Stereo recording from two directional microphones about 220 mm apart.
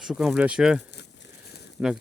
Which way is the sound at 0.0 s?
Centre (ahead or behind).